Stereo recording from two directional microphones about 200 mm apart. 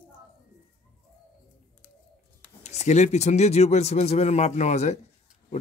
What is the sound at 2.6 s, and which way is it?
Speech, 35° left (ahead or behind).